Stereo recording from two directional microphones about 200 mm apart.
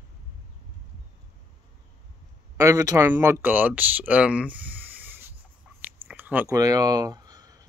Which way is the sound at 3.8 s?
10° right (ahead or behind).